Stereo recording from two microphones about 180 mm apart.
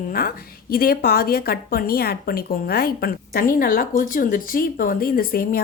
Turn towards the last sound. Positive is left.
turn(degrees=55)  # may be behind; listen again after turning